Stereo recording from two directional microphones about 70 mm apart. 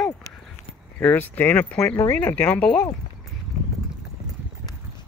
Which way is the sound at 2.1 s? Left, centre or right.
Left.